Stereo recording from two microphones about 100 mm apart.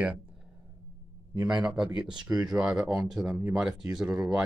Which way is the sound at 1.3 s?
45° right (ahead or behind).